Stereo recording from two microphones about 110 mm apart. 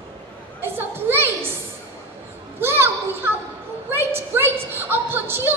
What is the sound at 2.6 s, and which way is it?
Children playing, 20° right (ahead or behind).